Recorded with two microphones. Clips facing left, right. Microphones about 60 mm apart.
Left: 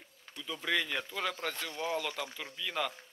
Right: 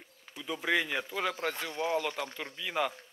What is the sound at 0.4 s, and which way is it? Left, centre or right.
Speech, centre.